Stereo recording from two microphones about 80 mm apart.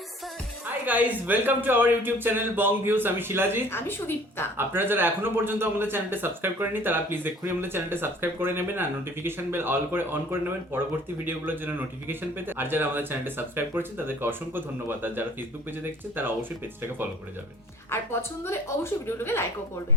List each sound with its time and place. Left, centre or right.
0.9 s a man's voice: right
3.7 s a woman's voice: left
4.5 s a man's voice: right
11.3 s a man's voice: right
17.9 s a woman's voice: left